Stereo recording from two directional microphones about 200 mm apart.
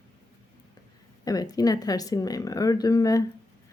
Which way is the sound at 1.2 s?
20° left (ahead or behind).